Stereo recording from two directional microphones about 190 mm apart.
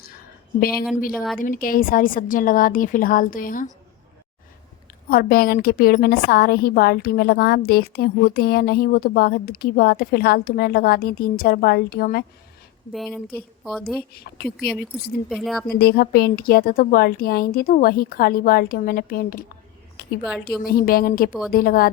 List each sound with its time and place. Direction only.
1.1 s speech: centre (ahead or behind)
1.4 s a woman's voice: 45° left (ahead or behind)
5.0 s a woman's voice: 50° left (ahead or behind)
12.9 s speech: centre (ahead or behind)
15.7 s a woman's voice: 55° left (ahead or behind)
20.7 s a woman's voice: 50° left (ahead or behind)